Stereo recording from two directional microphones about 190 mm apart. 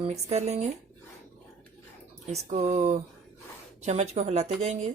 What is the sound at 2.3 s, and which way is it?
Speech, 35° right (ahead or behind).